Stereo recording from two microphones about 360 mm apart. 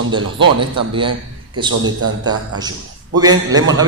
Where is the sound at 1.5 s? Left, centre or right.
Centre.